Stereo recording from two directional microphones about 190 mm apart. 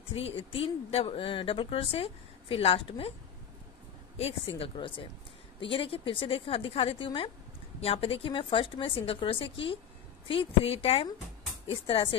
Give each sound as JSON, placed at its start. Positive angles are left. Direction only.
{"t": 0.1, "sound": "speech", "side_deg": 30}
{"t": 4.2, "sound": "speech", "side_deg": 30}